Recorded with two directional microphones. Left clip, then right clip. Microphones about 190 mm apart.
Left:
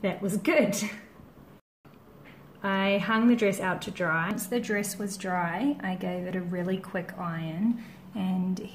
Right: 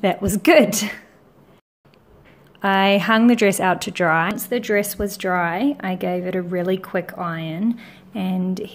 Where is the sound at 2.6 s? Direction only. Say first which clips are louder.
Right 10 dB; 55° right (ahead or behind).